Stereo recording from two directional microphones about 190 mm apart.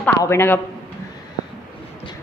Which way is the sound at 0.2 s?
15° left (ahead or behind).